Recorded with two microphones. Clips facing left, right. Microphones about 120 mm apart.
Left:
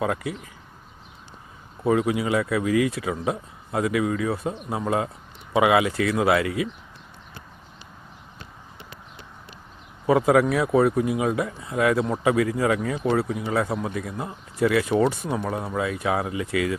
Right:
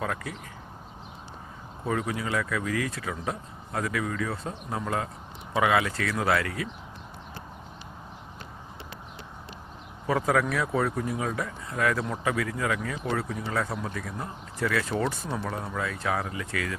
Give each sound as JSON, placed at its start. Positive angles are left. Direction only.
{"t": 0.0, "sound": "speech", "side_deg": 20}
{"t": 1.8, "sound": "speech", "side_deg": 20}
{"t": 10.1, "sound": "speech", "side_deg": 25}
{"t": 11.0, "sound": "speech", "side_deg": 15}
{"t": 13.2, "sound": "speech", "side_deg": 10}
{"t": 13.5, "sound": "speech", "side_deg": 25}
{"t": 15.3, "sound": "speech", "side_deg": 10}